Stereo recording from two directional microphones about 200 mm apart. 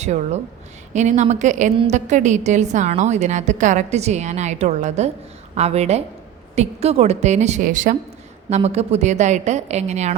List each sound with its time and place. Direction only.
0.0 s a woman's voice: 35° right (ahead or behind)